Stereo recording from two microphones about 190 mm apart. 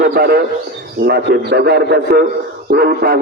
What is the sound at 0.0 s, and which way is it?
A man's voice, 55° right (ahead or behind).